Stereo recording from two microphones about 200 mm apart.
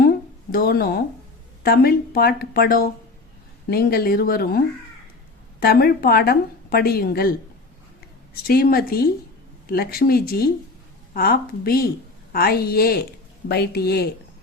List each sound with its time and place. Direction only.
0.5 s speech: 50° left (ahead or behind)
8.4 s speech: 50° left (ahead or behind)